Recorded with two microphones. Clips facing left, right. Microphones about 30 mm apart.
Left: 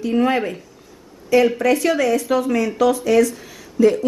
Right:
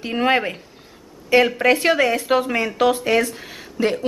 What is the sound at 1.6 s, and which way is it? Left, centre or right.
Speech, right.